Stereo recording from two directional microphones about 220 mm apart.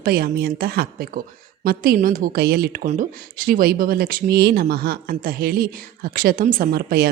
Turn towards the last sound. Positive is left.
turn(degrees=-45)  # may be behind; listen again after turning